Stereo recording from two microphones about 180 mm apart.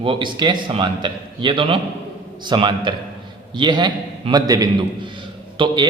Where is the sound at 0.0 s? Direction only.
25° right (ahead or behind).